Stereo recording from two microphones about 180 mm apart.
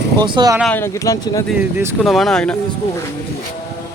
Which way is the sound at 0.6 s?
10° left (ahead or behind).